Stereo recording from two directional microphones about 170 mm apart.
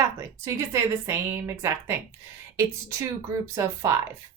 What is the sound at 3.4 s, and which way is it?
Speech, 15° right (ahead or behind).